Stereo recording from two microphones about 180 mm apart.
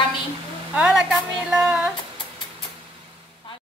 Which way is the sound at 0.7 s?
5° right (ahead or behind).